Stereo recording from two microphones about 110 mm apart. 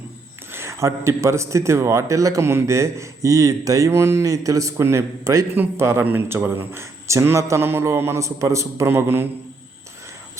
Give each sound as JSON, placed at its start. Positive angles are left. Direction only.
{"t": 0.5, "sound": "a man's voice", "side_deg": -25}